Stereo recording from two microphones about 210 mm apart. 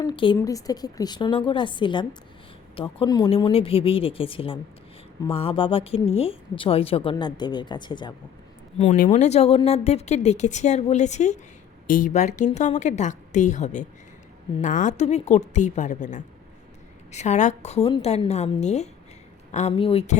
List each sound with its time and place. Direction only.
0.0 s speech: 20° left (ahead or behind)
9.0 s speech: 35° left (ahead or behind)